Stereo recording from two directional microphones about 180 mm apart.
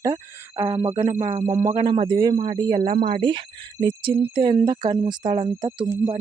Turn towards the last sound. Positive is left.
turn(degrees=-20)  # may be behind; listen again after turning